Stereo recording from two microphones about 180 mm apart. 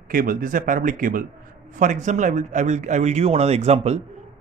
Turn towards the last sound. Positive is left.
turn(degrees=-35)  # may be behind; listen again after turning